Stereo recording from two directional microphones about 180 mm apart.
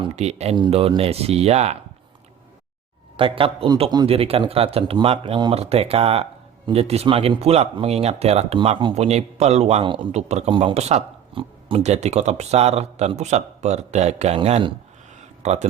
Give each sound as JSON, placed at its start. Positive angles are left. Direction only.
{"t": 0.0, "sound": "speech", "side_deg": -35}
{"t": 3.2, "sound": "speech", "side_deg": -30}